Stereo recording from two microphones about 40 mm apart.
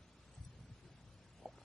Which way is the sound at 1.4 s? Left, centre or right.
Centre.